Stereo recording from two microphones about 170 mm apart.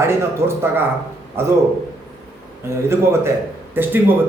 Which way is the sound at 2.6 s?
15° right (ahead or behind).